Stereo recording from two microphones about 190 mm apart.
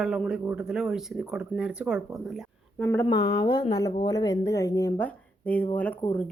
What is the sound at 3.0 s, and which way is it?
A woman's voice, 20° left (ahead or behind).